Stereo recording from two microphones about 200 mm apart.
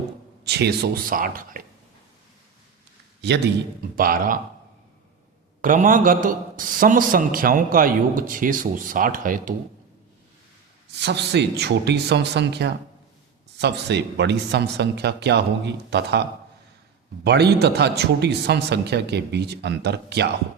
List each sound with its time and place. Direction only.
0.4 s a man's voice: 55° right (ahead or behind)
3.2 s a man's voice: 60° right (ahead or behind)
3.9 s a man's voice: 45° right (ahead or behind)
5.6 s a man's voice: 40° right (ahead or behind)
11.0 s a man's voice: 55° right (ahead or behind)
17.2 s a man's voice: 55° right (ahead or behind)